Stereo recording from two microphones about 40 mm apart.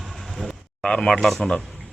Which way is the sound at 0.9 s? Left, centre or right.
Centre.